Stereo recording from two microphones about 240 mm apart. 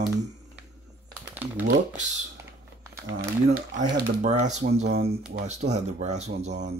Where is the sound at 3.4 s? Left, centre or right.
Right.